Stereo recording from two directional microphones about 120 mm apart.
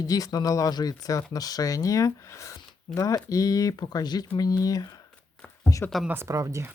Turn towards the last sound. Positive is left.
turn(degrees=-25)  # may be behind; listen again after turning